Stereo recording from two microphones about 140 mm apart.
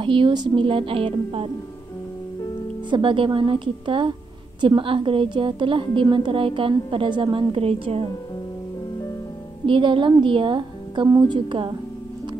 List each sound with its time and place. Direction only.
0.0 s a woman's voice: 35° right (ahead or behind)
2.9 s a woman's voice: 35° right (ahead or behind)
9.7 s a woman's voice: 35° right (ahead or behind)